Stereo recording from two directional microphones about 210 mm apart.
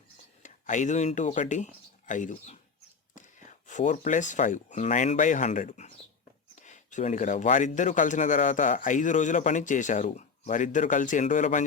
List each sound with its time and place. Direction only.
0.4 s speech: 35° left (ahead or behind)